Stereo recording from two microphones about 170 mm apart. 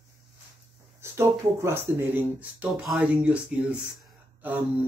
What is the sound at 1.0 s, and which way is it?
Speech, 15° right (ahead or behind).